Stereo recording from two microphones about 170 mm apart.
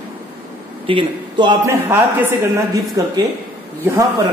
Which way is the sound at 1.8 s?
15° right (ahead or behind).